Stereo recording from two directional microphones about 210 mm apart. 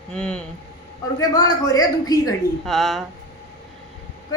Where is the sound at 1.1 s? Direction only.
15° left (ahead or behind).